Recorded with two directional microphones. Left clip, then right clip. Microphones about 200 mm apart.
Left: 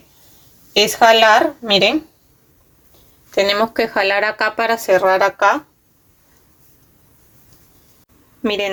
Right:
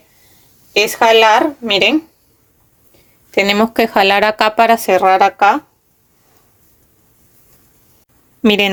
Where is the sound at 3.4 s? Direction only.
55° right (ahead or behind).